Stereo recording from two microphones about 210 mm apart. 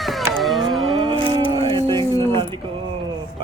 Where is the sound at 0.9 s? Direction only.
20° right (ahead or behind).